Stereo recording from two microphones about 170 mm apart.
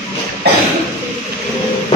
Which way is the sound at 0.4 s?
70° right (ahead or behind).